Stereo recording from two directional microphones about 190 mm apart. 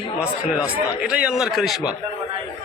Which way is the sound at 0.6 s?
5° right (ahead or behind).